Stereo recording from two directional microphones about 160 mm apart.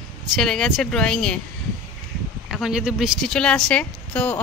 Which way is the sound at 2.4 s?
Centre (ahead or behind).